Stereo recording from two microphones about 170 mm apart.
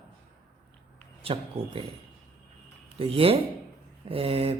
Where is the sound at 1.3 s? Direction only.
35° right (ahead or behind).